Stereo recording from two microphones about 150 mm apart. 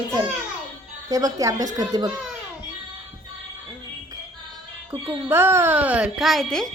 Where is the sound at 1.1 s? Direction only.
25° right (ahead or behind).